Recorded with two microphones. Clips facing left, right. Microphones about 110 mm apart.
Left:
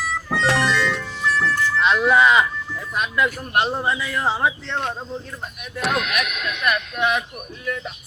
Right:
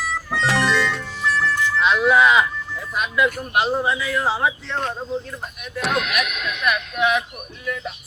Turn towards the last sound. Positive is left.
turn(degrees=0)  # may be behind; listen again after turning